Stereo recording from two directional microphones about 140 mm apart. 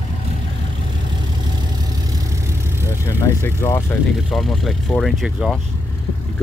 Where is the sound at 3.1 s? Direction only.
15° left (ahead or behind).